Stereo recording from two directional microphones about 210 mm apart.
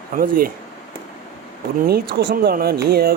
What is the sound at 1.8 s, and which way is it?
Speech, 45° right (ahead or behind).